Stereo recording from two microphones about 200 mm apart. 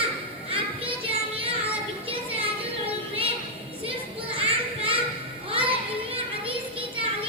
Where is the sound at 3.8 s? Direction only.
30° right (ahead or behind).